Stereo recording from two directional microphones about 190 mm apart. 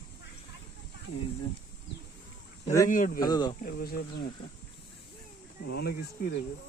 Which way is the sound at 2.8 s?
45° left (ahead or behind).